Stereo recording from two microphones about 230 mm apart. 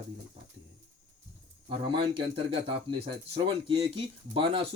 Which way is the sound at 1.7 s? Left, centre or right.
Right.